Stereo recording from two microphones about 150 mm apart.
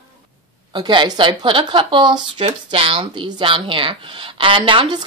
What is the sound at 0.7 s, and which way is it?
Speech, 30° right (ahead or behind).